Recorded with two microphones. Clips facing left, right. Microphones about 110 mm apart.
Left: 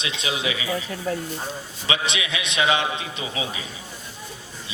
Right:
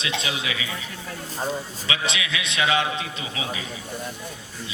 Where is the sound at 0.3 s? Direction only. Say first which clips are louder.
Left 4 dB; 25° left (ahead or behind).